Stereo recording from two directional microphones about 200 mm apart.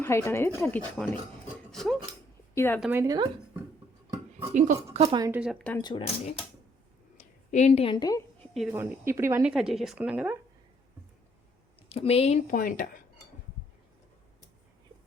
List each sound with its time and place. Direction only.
0.0 s speech: 15° left (ahead or behind)
1.7 s a sound: centre (ahead or behind)
2.6 s speech: 10° left (ahead or behind)
2.8 s speech: 10° right (ahead or behind)
4.4 s speech: 35° right (ahead or behind)
5.0 s speech: 15° right (ahead or behind)
5.4 s speech: centre (ahead or behind)
5.8 s a woman's voice: 25° left (ahead or behind)
7.5 s a woman's voice: 35° left (ahead or behind)
8.7 s speech: 10° right (ahead or behind)
11.8 s a woman's voice: 30° left (ahead or behind)